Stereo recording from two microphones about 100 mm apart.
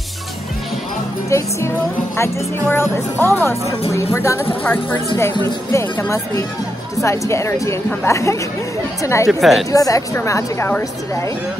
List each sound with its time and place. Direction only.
1.3 s a woman's voice: 30° left (ahead or behind)
9.3 s a woman's voice: centre (ahead or behind)
9.7 s a woman's voice: 35° left (ahead or behind)